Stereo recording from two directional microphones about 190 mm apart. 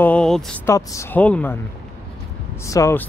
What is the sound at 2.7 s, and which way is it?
Speech, 15° left (ahead or behind).